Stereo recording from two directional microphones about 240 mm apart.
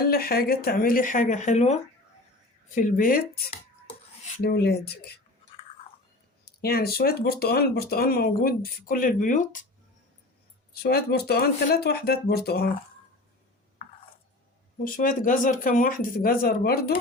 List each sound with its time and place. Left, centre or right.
0.0 s speech: left
6.6 s speech: left
10.7 s speech: left
14.8 s speech: left